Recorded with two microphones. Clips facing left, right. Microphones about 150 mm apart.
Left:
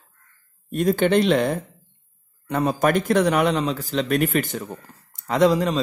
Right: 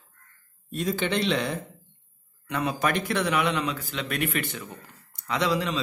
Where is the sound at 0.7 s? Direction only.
50° left (ahead or behind).